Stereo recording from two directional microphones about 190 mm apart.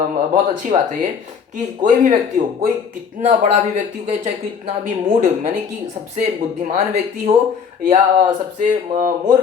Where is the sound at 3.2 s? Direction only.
40° right (ahead or behind).